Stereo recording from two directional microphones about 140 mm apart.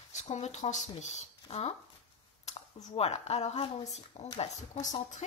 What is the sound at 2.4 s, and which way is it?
A woman's voice, 45° left (ahead or behind).